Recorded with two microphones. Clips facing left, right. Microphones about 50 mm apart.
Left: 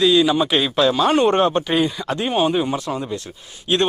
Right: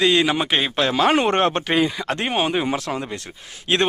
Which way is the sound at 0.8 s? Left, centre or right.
Right.